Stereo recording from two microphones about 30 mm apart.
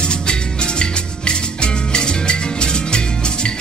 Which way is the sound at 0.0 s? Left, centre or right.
Left.